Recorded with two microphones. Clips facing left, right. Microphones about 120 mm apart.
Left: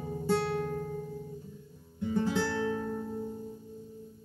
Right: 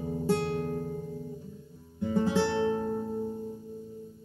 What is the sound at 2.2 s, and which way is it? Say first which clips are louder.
Music: right 4 dB; 20° right (ahead or behind).